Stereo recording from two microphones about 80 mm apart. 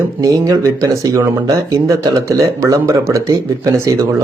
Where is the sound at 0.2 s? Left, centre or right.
Right.